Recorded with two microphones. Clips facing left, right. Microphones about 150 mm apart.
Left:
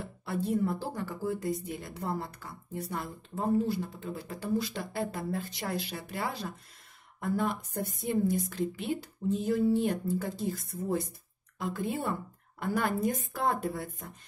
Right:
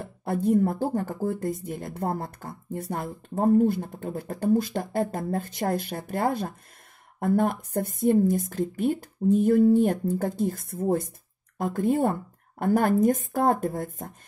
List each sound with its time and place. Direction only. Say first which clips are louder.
0.0 s speech: right 7 dB; 50° right (ahead or behind)